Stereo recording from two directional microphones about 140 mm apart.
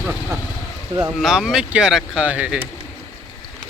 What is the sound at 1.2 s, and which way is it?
Speech, 5° right (ahead or behind).